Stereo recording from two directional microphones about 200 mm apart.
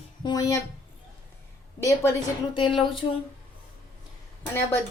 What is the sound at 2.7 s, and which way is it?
Speech, 25° left (ahead or behind).